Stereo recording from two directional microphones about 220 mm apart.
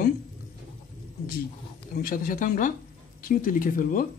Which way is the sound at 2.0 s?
40° left (ahead or behind).